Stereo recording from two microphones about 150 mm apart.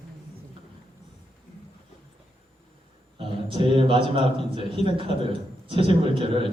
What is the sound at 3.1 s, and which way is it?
A man's voice, 35° right (ahead or behind).